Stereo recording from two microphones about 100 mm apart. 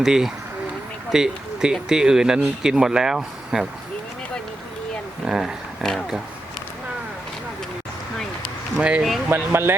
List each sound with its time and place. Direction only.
0.0 s speech: 5° right (ahead or behind)
5.2 s speech: 5° right (ahead or behind)
5.8 s speech: 5° left (ahead or behind)
8.7 s speech: 10° right (ahead or behind)
9.3 s speech: 25° right (ahead or behind)